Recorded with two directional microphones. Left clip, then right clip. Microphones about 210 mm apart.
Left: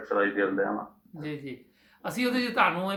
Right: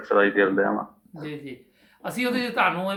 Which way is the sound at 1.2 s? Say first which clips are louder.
Right 1 dB; 5° left (ahead or behind).